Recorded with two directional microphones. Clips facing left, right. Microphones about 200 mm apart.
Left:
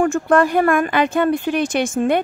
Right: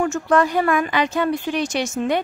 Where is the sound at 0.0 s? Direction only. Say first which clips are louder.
Left 3 dB; 55° left (ahead or behind).